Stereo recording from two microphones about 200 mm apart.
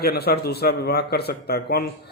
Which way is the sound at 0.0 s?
50° left (ahead or behind).